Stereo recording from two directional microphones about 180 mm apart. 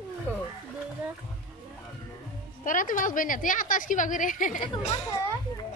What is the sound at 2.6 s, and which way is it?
A woman's voice, 50° left (ahead or behind).